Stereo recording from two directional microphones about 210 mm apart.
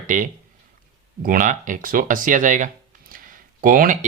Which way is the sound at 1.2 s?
40° right (ahead or behind).